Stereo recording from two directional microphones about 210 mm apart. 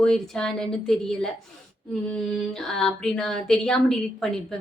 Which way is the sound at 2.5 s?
5° left (ahead or behind).